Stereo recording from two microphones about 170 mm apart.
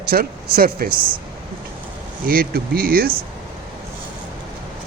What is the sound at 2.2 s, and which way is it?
Speech, 60° right (ahead or behind).